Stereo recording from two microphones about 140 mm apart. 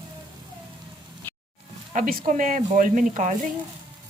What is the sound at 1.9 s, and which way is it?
Speech, 85° right.